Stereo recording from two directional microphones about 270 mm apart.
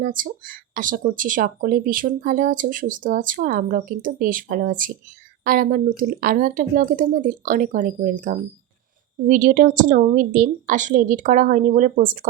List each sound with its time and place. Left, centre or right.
0.0 s a woman's voice: right